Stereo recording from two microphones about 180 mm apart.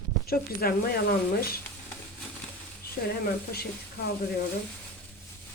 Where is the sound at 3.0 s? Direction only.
60° left (ahead or behind).